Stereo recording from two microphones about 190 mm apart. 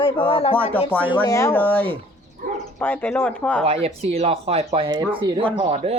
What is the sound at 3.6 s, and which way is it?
Speech, 30° right (ahead or behind).